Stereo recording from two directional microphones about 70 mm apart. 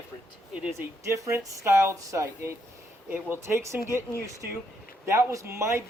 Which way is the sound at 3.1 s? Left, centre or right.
Right.